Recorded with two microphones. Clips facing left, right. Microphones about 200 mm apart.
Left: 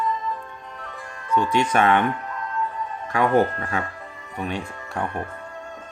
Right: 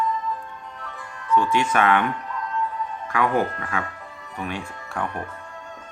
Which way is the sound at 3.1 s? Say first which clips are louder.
Left 3 dB; 30° left (ahead or behind).